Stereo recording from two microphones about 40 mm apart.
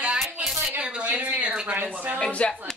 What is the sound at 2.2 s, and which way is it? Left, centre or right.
Speech, left.